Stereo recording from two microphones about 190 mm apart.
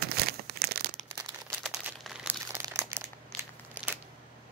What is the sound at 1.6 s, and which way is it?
Crumpling, centre (ahead or behind).